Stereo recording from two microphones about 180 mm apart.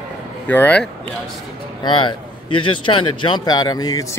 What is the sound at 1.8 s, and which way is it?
Speech, 25° left (ahead or behind).